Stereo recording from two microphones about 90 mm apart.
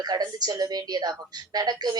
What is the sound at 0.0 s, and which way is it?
A woman's voice, 50° right (ahead or behind).